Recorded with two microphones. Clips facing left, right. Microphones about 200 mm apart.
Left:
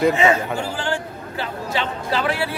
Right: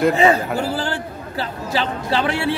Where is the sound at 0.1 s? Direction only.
35° right (ahead or behind).